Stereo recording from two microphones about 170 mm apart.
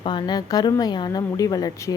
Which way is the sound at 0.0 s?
25° left (ahead or behind).